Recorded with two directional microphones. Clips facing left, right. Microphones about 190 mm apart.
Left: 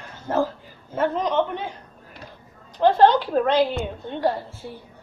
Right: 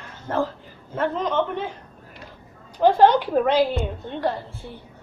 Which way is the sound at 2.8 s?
15° right (ahead or behind).